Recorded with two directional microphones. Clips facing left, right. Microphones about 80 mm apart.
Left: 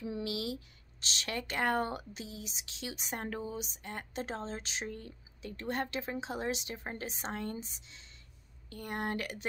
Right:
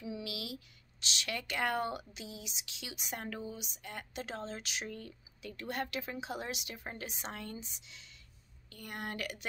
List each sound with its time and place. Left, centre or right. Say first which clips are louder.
0.0 s speech: left 5 dB; left